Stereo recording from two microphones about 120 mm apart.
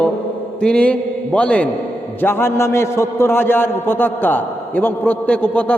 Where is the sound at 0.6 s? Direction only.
10° left (ahead or behind).